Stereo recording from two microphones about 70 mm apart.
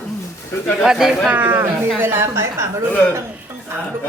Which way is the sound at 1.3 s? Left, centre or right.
Right.